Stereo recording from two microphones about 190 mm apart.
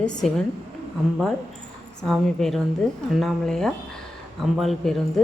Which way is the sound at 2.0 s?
Centre (ahead or behind).